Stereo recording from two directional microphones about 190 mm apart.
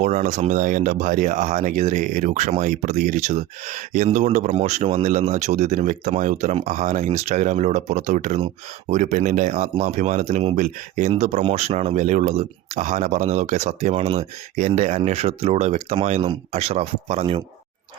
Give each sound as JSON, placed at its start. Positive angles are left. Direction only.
{"t": 0.0, "sound": "speech", "side_deg": -40}